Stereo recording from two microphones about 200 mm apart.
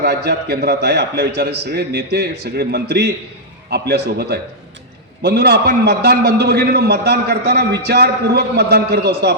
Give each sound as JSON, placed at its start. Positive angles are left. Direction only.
{"t": 0.0, "sound": "a man's voice", "side_deg": -55}